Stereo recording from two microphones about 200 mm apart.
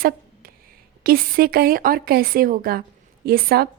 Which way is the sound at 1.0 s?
45° right (ahead or behind).